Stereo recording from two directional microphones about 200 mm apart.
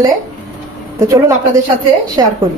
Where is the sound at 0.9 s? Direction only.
15° right (ahead or behind).